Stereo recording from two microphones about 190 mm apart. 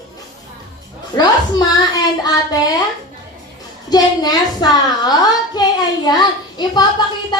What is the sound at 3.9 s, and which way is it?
A woman's voice, 20° left (ahead or behind).